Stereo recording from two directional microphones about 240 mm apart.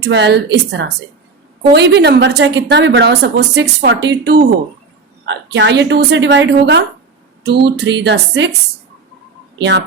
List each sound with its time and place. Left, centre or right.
0.0 s a woman's voice: right
9.6 s speech: right